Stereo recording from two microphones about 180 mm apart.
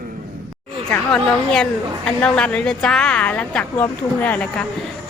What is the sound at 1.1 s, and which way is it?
A woman's voice, 5° left (ahead or behind).